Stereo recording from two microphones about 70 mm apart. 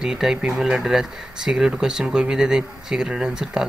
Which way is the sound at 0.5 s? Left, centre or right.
Centre.